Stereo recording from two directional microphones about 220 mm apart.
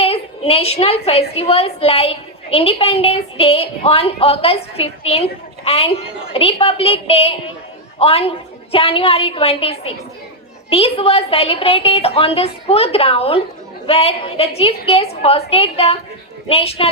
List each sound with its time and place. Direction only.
0.0 s a woman's voice: 25° left (ahead or behind)